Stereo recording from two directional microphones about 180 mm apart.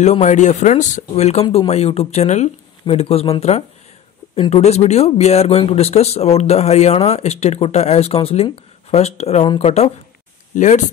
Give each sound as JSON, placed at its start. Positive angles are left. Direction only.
{"t": 0.0, "sound": "speech", "side_deg": 40}